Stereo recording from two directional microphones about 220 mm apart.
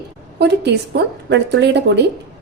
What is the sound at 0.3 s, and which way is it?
A woman's voice, 50° right (ahead or behind).